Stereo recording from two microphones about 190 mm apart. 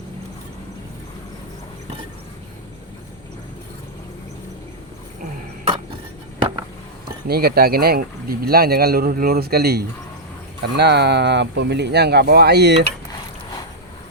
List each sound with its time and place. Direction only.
7.3 s speech: 55° right (ahead or behind)